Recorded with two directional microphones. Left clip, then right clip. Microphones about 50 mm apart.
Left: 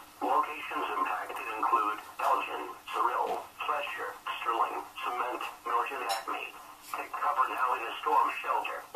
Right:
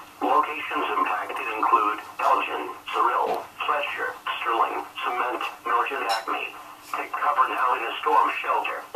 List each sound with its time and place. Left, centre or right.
0.2 s radio: right